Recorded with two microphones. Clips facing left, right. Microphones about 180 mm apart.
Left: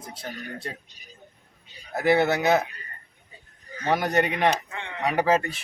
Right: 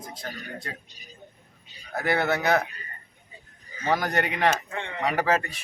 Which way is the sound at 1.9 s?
20° left (ahead or behind).